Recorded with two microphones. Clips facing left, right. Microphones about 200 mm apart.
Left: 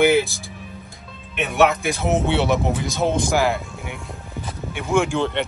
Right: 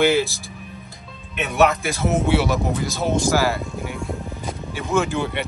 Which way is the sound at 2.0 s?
20° left (ahead or behind).